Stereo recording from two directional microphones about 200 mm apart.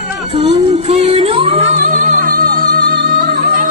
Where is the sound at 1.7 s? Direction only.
40° right (ahead or behind).